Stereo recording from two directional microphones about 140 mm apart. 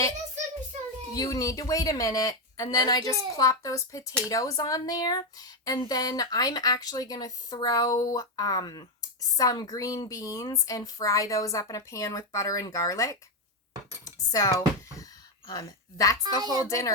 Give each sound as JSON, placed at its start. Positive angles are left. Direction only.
{"t": 1.1, "sound": "speech", "side_deg": 25}
{"t": 14.0, "sound": "dishes", "side_deg": 25}
{"t": 15.4, "sound": "speech", "side_deg": 25}
{"t": 16.2, "sound": "a woman's voice", "side_deg": -30}
{"t": 16.6, "sound": "speech", "side_deg": 25}